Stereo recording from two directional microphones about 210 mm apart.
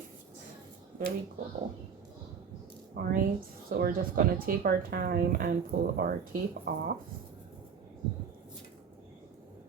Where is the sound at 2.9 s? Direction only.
40° right (ahead or behind).